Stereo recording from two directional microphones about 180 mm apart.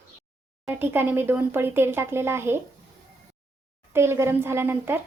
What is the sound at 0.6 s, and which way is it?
Speech, 10° right (ahead or behind).